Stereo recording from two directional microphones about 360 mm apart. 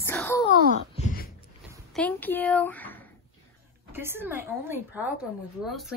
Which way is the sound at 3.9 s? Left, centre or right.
Centre.